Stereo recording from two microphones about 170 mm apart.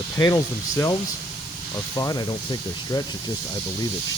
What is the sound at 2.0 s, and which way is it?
Speech, 20° left (ahead or behind).